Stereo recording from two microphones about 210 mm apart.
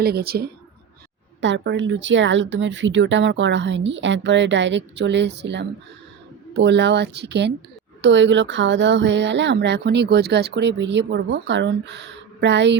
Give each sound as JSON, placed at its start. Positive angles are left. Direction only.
{"t": 0.0, "sound": "a woman's voice", "side_deg": -45}
{"t": 1.4, "sound": "speech", "side_deg": -60}